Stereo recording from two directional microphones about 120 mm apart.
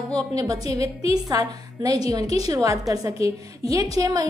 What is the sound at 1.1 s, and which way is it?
A woman's voice, 30° right (ahead or behind).